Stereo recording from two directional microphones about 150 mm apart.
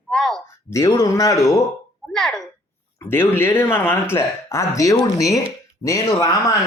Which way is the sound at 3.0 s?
15° left (ahead or behind).